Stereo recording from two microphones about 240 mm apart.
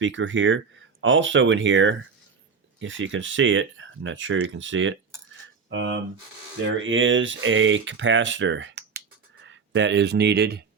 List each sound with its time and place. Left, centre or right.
0.0 s speech: right
6.6 s speech: right